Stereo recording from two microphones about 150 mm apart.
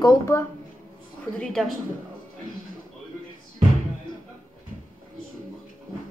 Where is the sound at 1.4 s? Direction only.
Centre (ahead or behind).